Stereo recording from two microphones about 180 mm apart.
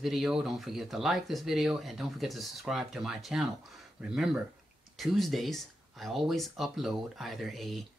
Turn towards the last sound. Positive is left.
turn(degrees=0)  # may be behind; listen again after turning